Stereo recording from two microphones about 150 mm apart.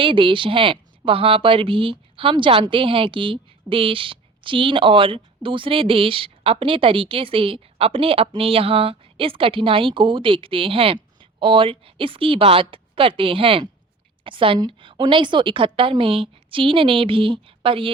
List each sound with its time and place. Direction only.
0.0 s a woman's voice: 35° right (ahead or behind)